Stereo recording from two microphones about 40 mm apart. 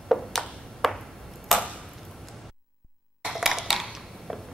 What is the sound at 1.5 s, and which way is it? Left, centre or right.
Chop, centre.